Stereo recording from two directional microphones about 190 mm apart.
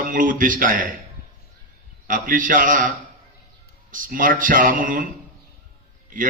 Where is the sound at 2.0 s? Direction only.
45° right (ahead or behind).